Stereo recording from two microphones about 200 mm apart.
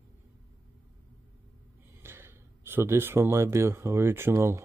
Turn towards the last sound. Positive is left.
turn(degrees=-15)  # may be behind; listen again after turning